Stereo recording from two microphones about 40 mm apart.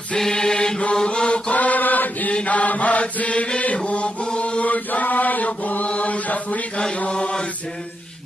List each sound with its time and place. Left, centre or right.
0.1 s mantra: centre
1.5 s chant: left
2.3 s mantra: left
3.7 s chant: left
7.1 s mantra: left